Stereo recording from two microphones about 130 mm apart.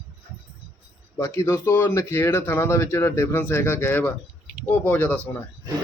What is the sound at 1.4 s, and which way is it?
Speech, 20° left (ahead or behind).